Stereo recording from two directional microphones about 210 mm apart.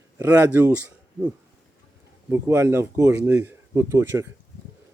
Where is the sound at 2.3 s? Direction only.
10° right (ahead or behind).